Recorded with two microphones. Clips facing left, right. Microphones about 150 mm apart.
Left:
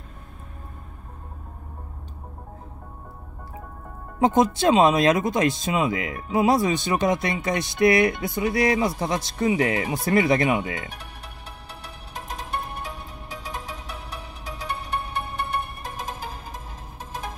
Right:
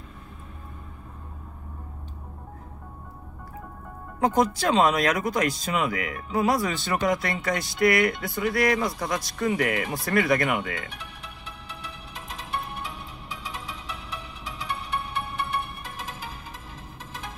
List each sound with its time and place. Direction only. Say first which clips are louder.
4.2 s speech: left 3 dB; 25° left (ahead or behind)
10.9 s music: left 1 dB; 40° left (ahead or behind)